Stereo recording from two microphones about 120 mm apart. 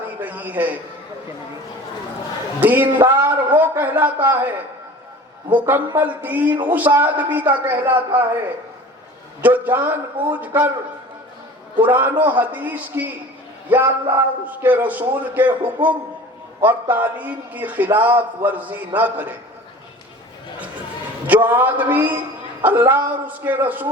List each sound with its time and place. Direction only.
0.2 s a sound: 15° right (ahead or behind)
2.6 s a man's voice: 15° right (ahead or behind)
5.5 s a man's voice: 15° right (ahead or behind)
9.4 s a man's voice: 15° right (ahead or behind)
11.8 s a man's voice: 15° right (ahead or behind)
21.2 s a man's voice: 15° right (ahead or behind)